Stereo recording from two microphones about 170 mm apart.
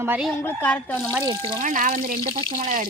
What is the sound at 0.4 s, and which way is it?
Speech, 10° left (ahead or behind).